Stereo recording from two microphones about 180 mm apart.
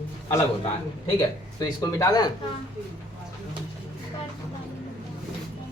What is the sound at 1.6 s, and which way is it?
Speech, 20° left (ahead or behind).